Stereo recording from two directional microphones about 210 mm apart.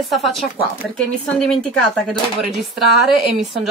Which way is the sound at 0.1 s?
Centre (ahead or behind).